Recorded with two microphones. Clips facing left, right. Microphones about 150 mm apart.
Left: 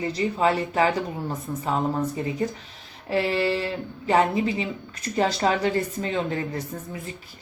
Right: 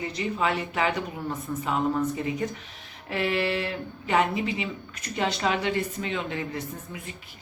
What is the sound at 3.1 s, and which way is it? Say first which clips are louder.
A woman's voice: left 3 dB; 35° left (ahead or behind).